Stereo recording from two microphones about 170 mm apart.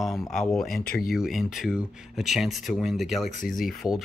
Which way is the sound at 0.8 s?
60° left (ahead or behind).